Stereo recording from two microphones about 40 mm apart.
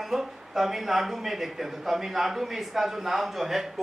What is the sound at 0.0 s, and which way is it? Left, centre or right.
Speech, centre.